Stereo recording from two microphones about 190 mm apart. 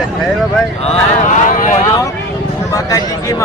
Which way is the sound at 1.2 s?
40° left (ahead or behind).